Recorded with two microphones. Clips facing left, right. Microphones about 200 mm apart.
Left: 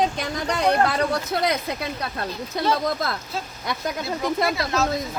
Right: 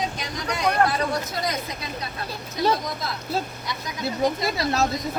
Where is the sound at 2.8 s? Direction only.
55° left (ahead or behind).